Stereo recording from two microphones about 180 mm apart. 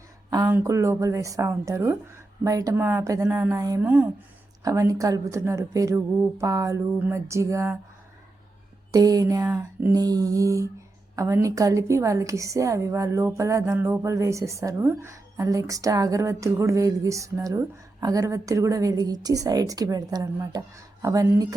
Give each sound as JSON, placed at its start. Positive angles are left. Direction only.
{"t": 0.3, "sound": "a woman's voice", "side_deg": -20}
{"t": 8.9, "sound": "a sound", "side_deg": -20}
{"t": 11.1, "sound": "a woman's voice", "side_deg": -15}